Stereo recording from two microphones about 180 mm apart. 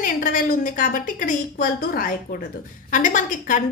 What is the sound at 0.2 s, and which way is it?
A woman's voice, 50° left (ahead or behind).